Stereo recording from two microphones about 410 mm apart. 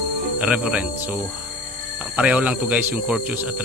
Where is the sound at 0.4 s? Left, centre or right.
Centre.